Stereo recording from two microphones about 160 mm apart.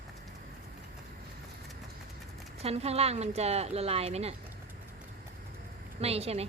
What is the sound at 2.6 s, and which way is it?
A woman's voice, 40° right (ahead or behind).